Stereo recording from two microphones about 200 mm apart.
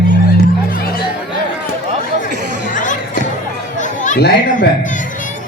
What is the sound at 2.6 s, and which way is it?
Music, 40° left (ahead or behind).